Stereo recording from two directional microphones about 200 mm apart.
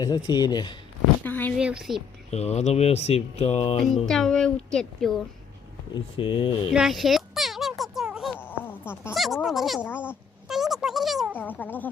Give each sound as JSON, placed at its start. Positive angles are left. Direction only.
{"t": 0.0, "sound": "speech", "side_deg": 20}
{"t": 1.2, "sound": "speech", "side_deg": 10}
{"t": 1.5, "sound": "speech", "side_deg": -5}
{"t": 2.3, "sound": "speech", "side_deg": 35}
{"t": 3.9, "sound": "speech", "side_deg": 0}
{"t": 6.1, "sound": "speech", "side_deg": 25}
{"t": 6.7, "sound": "a sound", "side_deg": -5}
{"t": 8.4, "sound": "dog", "side_deg": 10}
{"t": 9.1, "sound": "a sound", "side_deg": 0}
{"t": 11.3, "sound": "a sound", "side_deg": 10}